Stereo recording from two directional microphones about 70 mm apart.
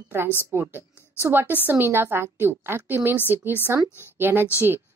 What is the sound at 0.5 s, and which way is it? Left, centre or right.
A woman's voice, right.